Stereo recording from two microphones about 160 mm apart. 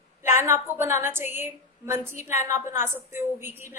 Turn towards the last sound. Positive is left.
turn(degrees=-15)  # may be behind; listen again after turning